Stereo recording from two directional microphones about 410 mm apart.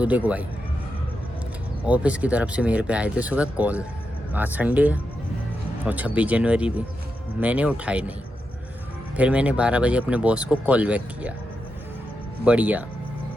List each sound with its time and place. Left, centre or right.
0.0 s speech: centre
1.9 s speech: centre
9.1 s speech: centre
12.5 s speech: centre